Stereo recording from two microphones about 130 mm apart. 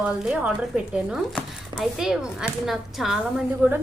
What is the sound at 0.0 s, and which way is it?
Speech, 5° right (ahead or behind).